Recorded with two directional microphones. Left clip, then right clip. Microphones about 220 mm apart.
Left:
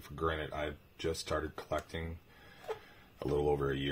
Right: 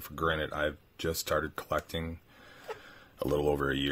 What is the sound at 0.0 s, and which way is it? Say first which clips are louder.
Speech: right 5 dB; 50° right (ahead or behind).